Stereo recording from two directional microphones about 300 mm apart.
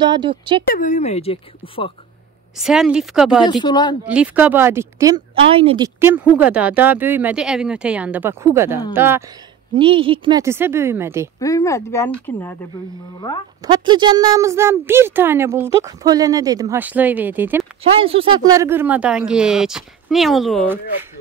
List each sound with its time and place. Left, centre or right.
0.0 s a woman's voice: centre
0.7 s speech: left
2.5 s speech: centre
3.4 s speech: centre
4.0 s a woman's voice: centre
5.9 s a woman's voice: centre
11.3 s speech: centre
13.7 s a woman's voice: centre
17.9 s speech: centre